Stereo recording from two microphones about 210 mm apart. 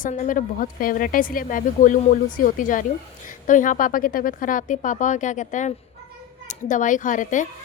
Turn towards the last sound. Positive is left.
turn(degrees=35)  # may be behind; listen again after turning